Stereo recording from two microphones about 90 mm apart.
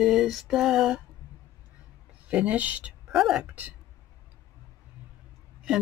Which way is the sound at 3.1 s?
5° right (ahead or behind).